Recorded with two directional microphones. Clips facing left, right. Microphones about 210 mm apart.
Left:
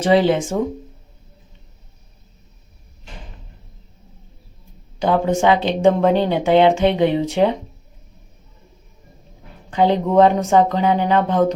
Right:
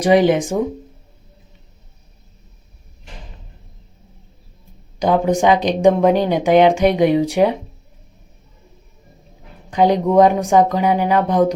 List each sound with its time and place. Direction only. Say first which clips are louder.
0.0 s speech: right 2 dB; 15° right (ahead or behind)
4.9 s speech: right 2 dB; 15° right (ahead or behind)
9.6 s speech: right 2 dB; 15° right (ahead or behind)